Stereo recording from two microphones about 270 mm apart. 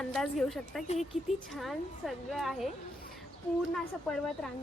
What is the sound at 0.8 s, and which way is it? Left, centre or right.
Speech, left.